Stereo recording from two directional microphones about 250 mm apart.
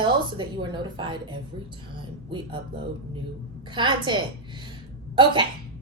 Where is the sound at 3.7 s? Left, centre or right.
Centre.